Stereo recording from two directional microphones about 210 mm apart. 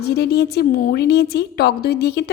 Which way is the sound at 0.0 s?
50° left (ahead or behind).